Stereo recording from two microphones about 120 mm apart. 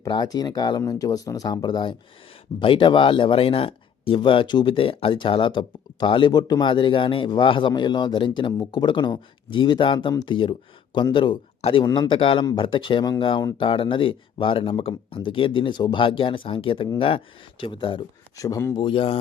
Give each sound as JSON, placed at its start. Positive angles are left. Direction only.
{"t": 0.1, "sound": "speech", "side_deg": 35}
{"t": 18.3, "sound": "speech", "side_deg": 30}
{"t": 18.7, "sound": "speech", "side_deg": 45}